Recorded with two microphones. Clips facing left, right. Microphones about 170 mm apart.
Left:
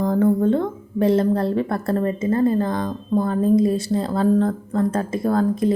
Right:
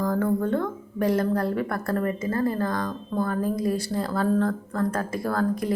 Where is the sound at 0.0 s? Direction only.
25° left (ahead or behind).